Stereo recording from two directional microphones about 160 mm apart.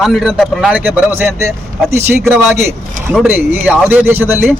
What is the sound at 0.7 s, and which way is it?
Speech, 15° right (ahead or behind).